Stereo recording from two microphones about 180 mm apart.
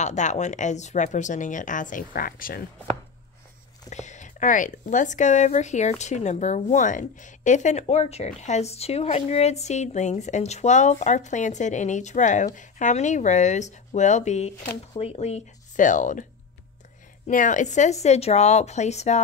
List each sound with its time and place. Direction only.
0.0 s speech: 40° left (ahead or behind)
3.9 s speech: 40° left (ahead or behind)
17.3 s speech: 45° left (ahead or behind)